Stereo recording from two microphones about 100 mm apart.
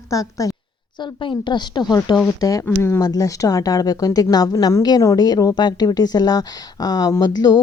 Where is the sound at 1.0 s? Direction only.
55° left (ahead or behind).